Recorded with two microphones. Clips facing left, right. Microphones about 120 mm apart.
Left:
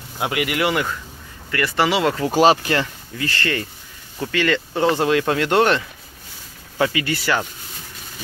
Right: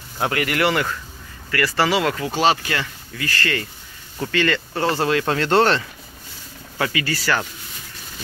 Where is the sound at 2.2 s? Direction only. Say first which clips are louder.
Left 4 dB; 40° left (ahead or behind); by 5.9 s 10° left (ahead or behind).